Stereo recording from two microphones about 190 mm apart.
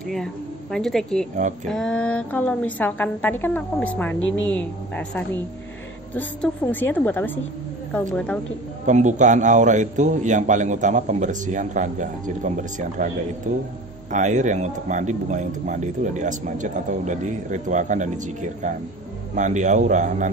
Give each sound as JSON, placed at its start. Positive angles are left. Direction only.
{"t": 0.1, "sound": "a woman's voice", "side_deg": 5}
{"t": 1.3, "sound": "speech", "side_deg": -40}
{"t": 1.7, "sound": "speech", "side_deg": 5}
{"t": 8.8, "sound": "speech", "side_deg": -40}